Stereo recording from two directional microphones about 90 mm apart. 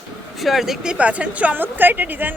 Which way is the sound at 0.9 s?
15° right (ahead or behind).